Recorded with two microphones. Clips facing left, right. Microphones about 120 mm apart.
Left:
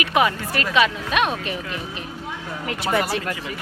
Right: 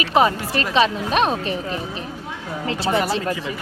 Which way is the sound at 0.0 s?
30° right (ahead or behind).